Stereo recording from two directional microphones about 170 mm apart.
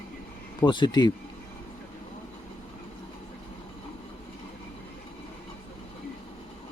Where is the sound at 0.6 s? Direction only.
25° left (ahead or behind).